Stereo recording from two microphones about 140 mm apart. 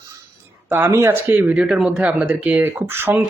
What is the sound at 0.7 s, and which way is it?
Speech, 20° right (ahead or behind).